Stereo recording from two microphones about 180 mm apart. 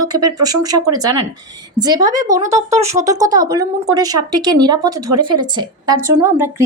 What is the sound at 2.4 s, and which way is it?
Speech, 40° right (ahead or behind).